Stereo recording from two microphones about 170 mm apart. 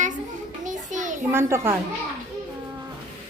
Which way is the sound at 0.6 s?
50° right (ahead or behind).